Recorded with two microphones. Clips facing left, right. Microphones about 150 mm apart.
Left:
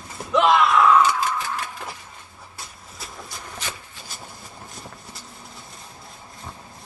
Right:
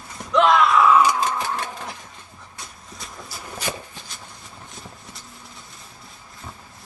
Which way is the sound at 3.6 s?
15° right (ahead or behind).